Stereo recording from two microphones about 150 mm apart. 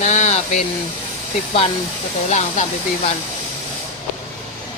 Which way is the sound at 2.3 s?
50° left (ahead or behind).